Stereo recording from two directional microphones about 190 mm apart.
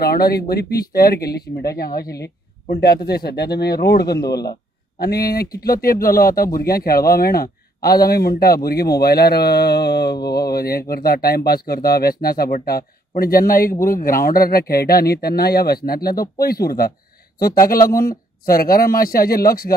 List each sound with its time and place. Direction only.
0.0 s speech: 55° left (ahead or behind)